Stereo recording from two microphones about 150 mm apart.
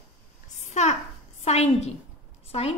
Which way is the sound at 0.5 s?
50° left (ahead or behind).